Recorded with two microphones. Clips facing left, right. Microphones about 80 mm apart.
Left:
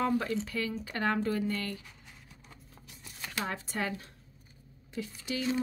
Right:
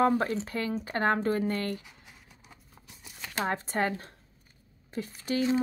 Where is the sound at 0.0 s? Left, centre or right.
Right.